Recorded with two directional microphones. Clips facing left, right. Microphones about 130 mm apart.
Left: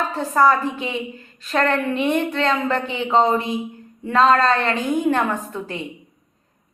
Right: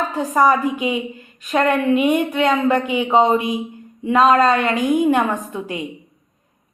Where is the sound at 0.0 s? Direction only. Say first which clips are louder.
Right 1 dB; 15° right (ahead or behind).